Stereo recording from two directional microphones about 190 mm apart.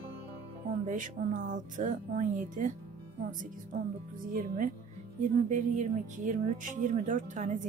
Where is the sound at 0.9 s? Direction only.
40° right (ahead or behind).